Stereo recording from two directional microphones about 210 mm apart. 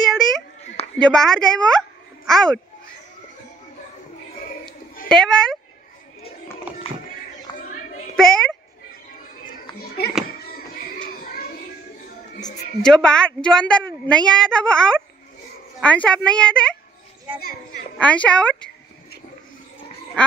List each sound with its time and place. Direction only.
0.9 s a child's voice: 5° left (ahead or behind)
5.0 s speech: 5° left (ahead or behind)
6.7 s a sound: 5° right (ahead or behind)
7.5 s a sound: 20° left (ahead or behind)
8.2 s a woman's voice: 5° left (ahead or behind)
9.8 s a sound: 50° left (ahead or behind)
12.4 s music: 35° left (ahead or behind)
12.8 s a woman's voice: 5° left (ahead or behind)
17.9 s a woman's voice: 5° left (ahead or behind)